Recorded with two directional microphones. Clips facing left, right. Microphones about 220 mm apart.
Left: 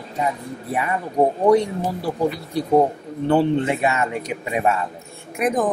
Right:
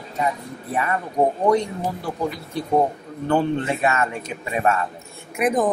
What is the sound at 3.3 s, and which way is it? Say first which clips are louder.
Speech: left 3 dB; 15° left (ahead or behind).